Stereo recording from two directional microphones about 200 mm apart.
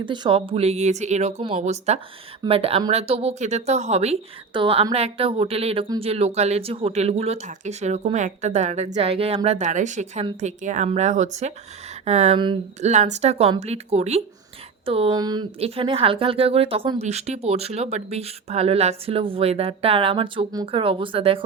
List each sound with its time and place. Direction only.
0.0 s speech: 25° right (ahead or behind)